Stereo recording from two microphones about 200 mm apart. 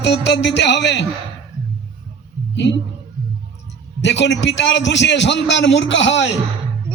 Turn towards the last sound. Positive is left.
turn(degrees=65)  # may be behind; listen again after turning